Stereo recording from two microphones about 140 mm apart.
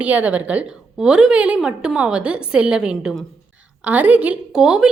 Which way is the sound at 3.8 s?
10° right (ahead or behind).